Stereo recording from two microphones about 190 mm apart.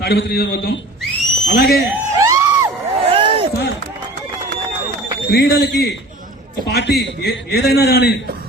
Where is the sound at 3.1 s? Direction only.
30° right (ahead or behind).